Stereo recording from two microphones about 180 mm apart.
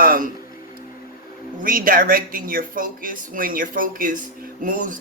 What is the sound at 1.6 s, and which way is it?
Speech, 50° right (ahead or behind).